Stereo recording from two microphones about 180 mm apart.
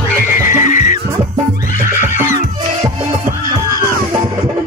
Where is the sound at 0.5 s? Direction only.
45° left (ahead or behind).